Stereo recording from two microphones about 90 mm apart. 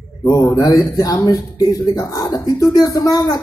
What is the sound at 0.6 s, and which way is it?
Speech, 45° left (ahead or behind).